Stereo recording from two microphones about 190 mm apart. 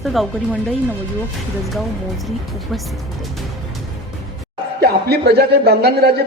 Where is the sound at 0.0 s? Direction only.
Centre (ahead or behind).